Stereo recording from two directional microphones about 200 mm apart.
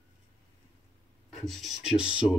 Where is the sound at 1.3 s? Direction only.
Centre (ahead or behind).